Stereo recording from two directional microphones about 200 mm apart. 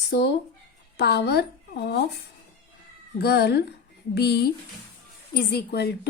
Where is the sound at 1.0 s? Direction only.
55° left (ahead or behind).